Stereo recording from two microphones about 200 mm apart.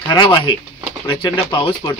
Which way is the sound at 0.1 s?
20° left (ahead or behind).